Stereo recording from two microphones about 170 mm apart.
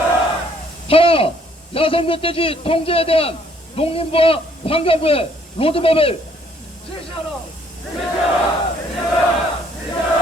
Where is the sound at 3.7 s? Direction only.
35° left (ahead or behind).